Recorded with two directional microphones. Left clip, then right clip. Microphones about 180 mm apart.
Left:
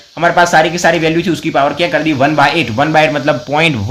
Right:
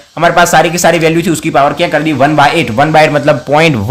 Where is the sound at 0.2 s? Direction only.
30° right (ahead or behind).